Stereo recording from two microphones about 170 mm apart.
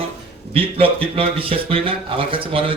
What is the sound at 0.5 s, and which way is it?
Speech, 35° right (ahead or behind).